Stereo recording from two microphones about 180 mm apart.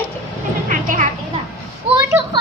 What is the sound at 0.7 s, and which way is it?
Speech, 45° right (ahead or behind).